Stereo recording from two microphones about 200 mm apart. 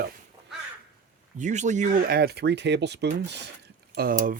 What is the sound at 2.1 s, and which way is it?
Speech, 55° right (ahead or behind).